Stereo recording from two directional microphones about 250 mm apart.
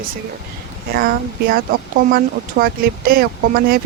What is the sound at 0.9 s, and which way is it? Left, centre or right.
Speech, right.